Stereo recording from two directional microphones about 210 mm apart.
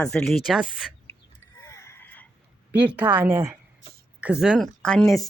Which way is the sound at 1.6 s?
15° left (ahead or behind).